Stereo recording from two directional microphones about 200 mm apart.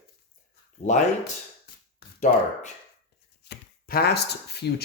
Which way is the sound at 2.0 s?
40° left (ahead or behind).